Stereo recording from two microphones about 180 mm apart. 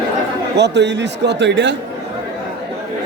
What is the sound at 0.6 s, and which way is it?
A man's voice, 70° right (ahead or behind).